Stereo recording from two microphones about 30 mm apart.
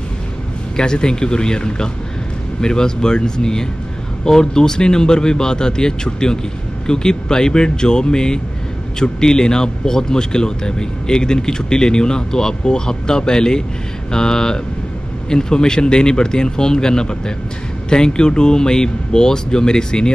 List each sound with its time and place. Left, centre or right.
0.7 s a man's voice: left